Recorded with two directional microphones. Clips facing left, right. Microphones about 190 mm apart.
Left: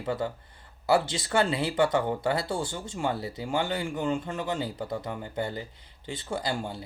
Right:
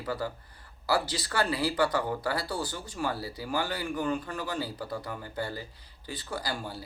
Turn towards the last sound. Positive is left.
turn(degrees=25)  # may be behind; listen again after turning